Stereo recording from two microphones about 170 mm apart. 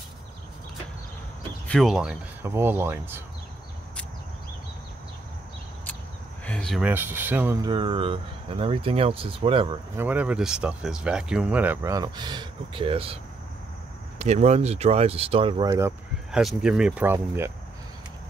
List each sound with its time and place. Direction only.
1.7 s speech: centre (ahead or behind)
2.4 s speech: 15° right (ahead or behind)
6.4 s speech: 5° left (ahead or behind)
6.8 s speech: 10° right (ahead or behind)
7.6 s speech: 30° right (ahead or behind)
9.9 s speech: 10° right (ahead or behind)
16.3 s speech: 5° right (ahead or behind)